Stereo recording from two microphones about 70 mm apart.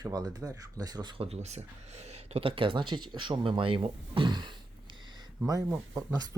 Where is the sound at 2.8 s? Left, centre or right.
Right.